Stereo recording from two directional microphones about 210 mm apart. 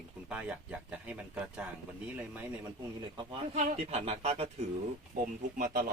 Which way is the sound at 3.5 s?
35° right (ahead or behind).